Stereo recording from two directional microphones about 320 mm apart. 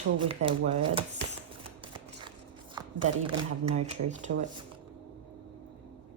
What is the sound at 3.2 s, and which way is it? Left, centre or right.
Speech, centre.